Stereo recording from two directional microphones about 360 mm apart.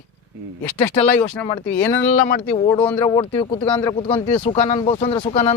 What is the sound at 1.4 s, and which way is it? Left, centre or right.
Speech, centre.